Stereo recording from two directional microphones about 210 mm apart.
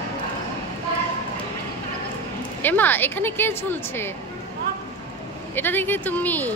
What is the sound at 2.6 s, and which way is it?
A woman's voice, 10° left (ahead or behind).